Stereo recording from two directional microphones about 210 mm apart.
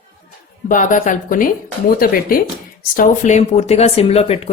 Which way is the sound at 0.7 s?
40° left (ahead or behind).